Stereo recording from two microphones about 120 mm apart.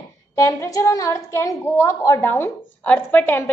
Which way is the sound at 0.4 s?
30° left (ahead or behind).